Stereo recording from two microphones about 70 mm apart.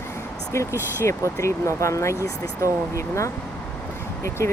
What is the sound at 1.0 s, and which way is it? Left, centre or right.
Speech, left.